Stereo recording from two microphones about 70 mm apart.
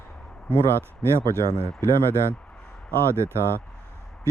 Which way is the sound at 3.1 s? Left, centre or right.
Right.